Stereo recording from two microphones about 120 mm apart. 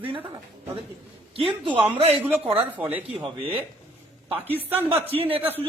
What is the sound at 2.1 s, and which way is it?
Speech, 10° right (ahead or behind).